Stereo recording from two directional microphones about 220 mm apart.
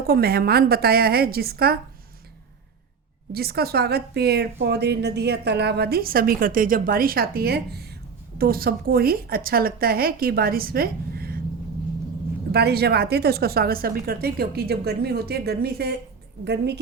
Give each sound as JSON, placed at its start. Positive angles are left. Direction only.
{"t": 0.1, "sound": "a woman's voice", "side_deg": -45}
{"t": 3.3, "sound": "a woman's voice", "side_deg": -45}
{"t": 12.5, "sound": "a woman's voice", "side_deg": -45}